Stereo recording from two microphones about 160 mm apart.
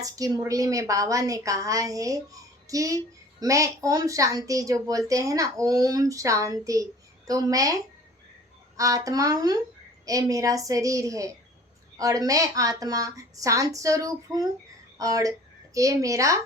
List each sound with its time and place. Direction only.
0.0 s a woman's voice: 20° right (ahead or behind)